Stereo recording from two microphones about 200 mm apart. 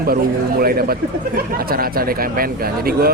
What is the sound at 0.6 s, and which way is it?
Speech, 50° right (ahead or behind).